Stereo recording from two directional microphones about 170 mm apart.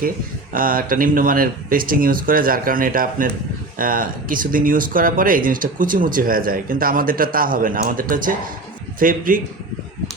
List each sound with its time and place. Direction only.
0.5 s speech: 55° right (ahead or behind)